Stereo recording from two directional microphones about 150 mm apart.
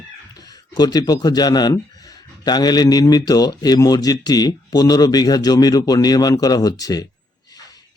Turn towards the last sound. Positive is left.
turn(degrees=25)  # may be behind; listen again after turning